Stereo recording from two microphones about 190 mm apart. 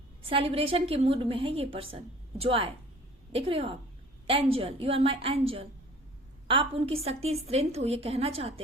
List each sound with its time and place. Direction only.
0.3 s a woman's voice: 30° right (ahead or behind)